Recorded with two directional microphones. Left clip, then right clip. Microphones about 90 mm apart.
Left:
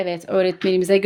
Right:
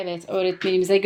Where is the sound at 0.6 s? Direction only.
50° left (ahead or behind).